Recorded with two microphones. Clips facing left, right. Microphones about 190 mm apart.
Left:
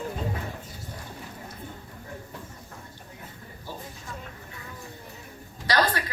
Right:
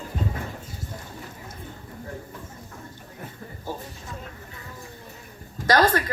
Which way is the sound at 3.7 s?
50° right (ahead or behind).